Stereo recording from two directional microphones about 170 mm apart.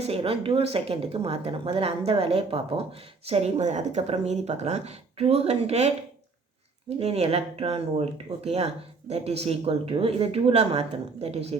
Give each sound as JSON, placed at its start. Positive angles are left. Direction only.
{"t": 0.0, "sound": "speech", "side_deg": -35}
{"t": 7.0, "sound": "speech", "side_deg": -35}